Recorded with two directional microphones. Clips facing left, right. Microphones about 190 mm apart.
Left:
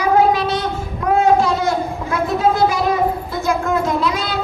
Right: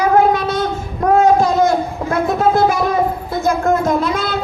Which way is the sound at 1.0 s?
40° right (ahead or behind).